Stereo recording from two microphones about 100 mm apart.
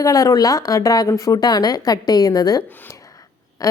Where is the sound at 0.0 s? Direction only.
35° left (ahead or behind).